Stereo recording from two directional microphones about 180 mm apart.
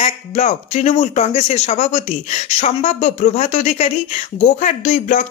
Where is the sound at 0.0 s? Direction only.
40° left (ahead or behind).